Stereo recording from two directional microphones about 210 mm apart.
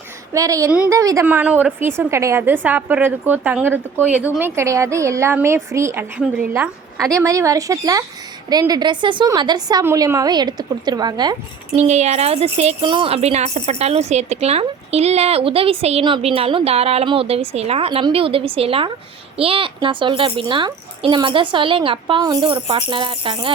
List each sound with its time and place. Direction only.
0.3 s a woman's voice: 15° right (ahead or behind)
11.8 s speech: 30° right (ahead or behind)